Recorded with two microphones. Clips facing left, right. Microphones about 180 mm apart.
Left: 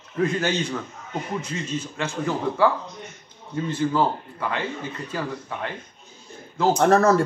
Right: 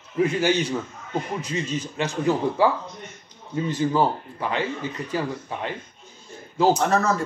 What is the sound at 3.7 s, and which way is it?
A man's voice, 15° right (ahead or behind).